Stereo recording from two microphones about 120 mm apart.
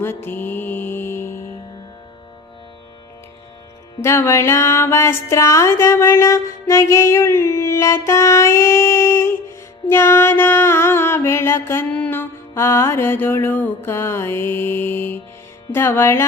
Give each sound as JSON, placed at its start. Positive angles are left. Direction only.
{"t": 0.0, "sound": "music", "side_deg": 20}
{"t": 4.0, "sound": "music", "side_deg": 20}